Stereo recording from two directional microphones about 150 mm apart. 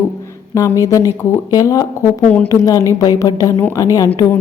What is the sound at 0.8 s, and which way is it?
Music, 20° left (ahead or behind).